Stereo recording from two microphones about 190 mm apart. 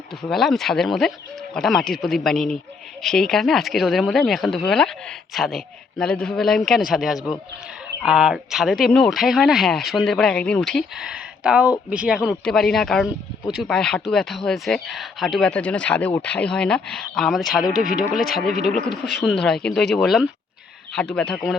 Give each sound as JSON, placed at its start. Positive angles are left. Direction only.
{"t": 0.2, "sound": "speech", "side_deg": 0}
{"t": 17.7, "sound": "speech", "side_deg": 50}
{"t": 19.0, "sound": "speech", "side_deg": 0}